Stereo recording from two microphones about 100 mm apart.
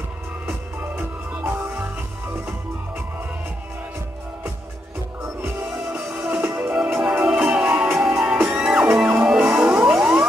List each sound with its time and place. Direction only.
0.9 s music: 15° right (ahead or behind)
5.9 s music: 20° right (ahead or behind)